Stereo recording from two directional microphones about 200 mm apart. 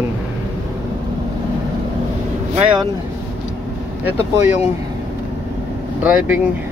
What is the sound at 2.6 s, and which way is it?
Speech, 25° right (ahead or behind).